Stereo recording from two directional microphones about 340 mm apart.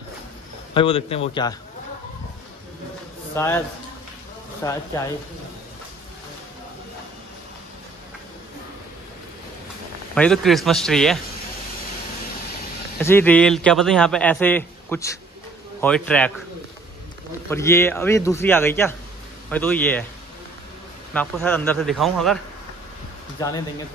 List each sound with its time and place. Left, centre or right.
0.7 s a man's voice: centre
3.3 s a man's voice: centre
10.1 s a man's voice: centre
13.0 s a man's voice: centre
17.5 s a man's voice: centre
21.1 s a man's voice: centre
23.4 s a man's voice: centre